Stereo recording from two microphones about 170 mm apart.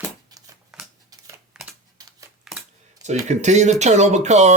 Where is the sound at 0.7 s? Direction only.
Centre (ahead or behind).